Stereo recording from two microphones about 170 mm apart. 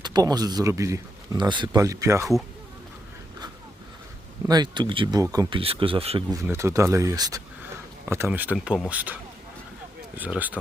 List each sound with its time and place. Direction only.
0.0 s speech: 25° right (ahead or behind)
4.4 s speech: 25° right (ahead or behind)
6.3 s speech: 15° right (ahead or behind)
10.2 s speech: 10° right (ahead or behind)